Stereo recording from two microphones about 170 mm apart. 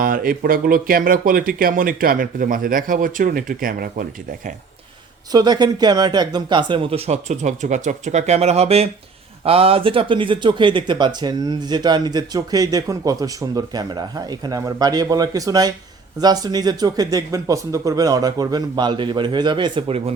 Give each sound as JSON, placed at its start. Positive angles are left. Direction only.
{"t": 0.0, "sound": "speech", "side_deg": -60}
{"t": 5.3, "sound": "speech", "side_deg": -25}